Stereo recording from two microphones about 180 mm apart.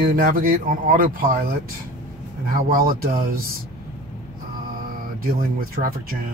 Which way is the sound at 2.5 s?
55° right (ahead or behind).